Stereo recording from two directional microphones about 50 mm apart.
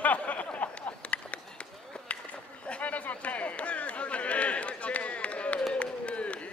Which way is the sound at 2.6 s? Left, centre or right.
Left.